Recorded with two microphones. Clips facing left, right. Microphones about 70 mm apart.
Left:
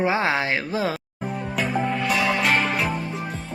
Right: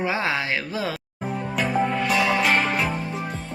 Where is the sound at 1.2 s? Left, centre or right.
Centre.